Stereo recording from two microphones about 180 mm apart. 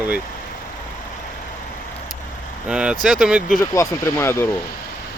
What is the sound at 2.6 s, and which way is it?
Speech, 5° right (ahead or behind).